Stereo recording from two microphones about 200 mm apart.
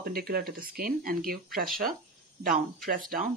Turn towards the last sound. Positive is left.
turn(degrees=-45)  # may be behind; listen again after turning